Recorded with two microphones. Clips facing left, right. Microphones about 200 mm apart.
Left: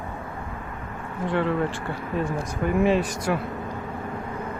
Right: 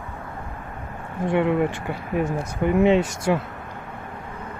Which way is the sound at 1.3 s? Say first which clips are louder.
Right 4 dB; 20° right (ahead or behind).